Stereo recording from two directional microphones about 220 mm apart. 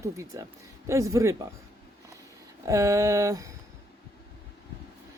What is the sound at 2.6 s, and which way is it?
Speech, 15° right (ahead or behind).